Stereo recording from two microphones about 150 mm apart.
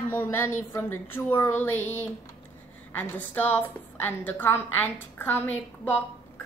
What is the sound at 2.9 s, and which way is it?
A woman's voice, 10° left (ahead or behind).